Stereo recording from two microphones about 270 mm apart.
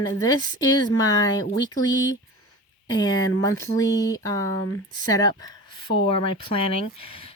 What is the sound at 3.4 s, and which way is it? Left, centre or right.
Speech, centre.